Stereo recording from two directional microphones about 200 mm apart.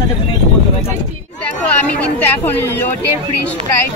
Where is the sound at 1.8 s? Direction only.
5° left (ahead or behind).